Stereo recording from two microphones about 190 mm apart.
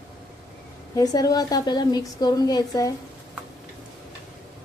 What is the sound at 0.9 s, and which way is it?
A woman's voice, 20° left (ahead or behind).